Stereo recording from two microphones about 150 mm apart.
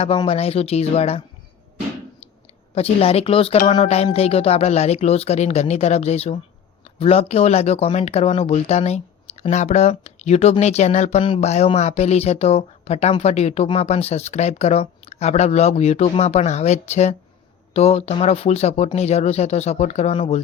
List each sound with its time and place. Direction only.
0.3 s speech: 40° left (ahead or behind)
2.7 s speech: 40° left (ahead or behind)
11.2 s speech: 40° left (ahead or behind)